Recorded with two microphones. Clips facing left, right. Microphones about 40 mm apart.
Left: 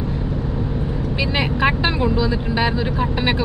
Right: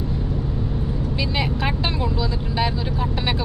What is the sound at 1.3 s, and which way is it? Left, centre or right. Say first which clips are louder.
Speech: left 7 dB; left.